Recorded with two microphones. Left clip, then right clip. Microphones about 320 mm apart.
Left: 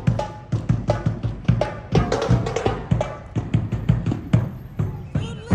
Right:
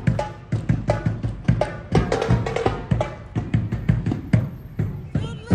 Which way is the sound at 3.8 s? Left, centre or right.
Right.